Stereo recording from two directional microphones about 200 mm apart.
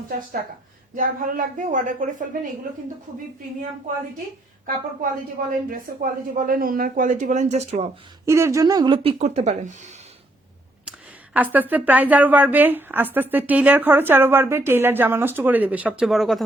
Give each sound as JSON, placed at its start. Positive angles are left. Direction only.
{"t": 0.9, "sound": "speech", "side_deg": -40}
{"t": 5.6, "sound": "speech", "side_deg": -45}
{"t": 8.3, "sound": "a woman's voice", "side_deg": -15}
{"t": 11.3, "sound": "speech", "side_deg": -10}